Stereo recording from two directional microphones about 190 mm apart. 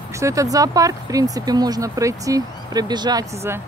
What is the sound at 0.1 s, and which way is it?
Speech, 15° right (ahead or behind).